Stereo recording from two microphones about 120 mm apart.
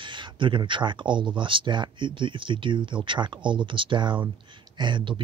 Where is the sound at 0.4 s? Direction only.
45° right (ahead or behind).